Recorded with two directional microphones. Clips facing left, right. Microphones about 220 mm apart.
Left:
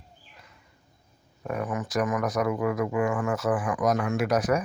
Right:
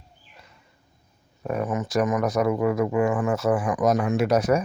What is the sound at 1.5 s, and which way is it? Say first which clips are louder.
Speech: right 4 dB; 25° right (ahead or behind).